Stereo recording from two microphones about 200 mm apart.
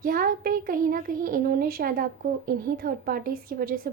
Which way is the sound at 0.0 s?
45° right (ahead or behind).